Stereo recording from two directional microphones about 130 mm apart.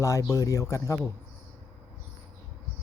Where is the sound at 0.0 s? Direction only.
25° left (ahead or behind).